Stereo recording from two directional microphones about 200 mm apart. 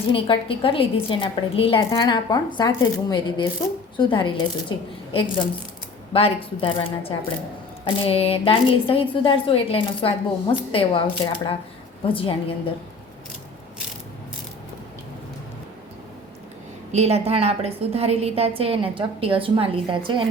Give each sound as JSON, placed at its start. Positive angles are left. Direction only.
{"t": 0.1, "sound": "a woman's voice", "side_deg": 25}
{"t": 16.9, "sound": "a woman's voice", "side_deg": -30}